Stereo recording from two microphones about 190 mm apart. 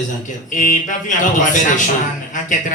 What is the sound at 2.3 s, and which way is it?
Music, 40° left (ahead or behind).